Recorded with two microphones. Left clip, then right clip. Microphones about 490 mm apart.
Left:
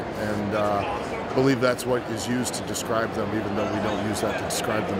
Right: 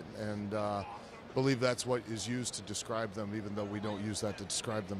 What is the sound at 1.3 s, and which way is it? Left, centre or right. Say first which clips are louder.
Speech: left 9 dB; right.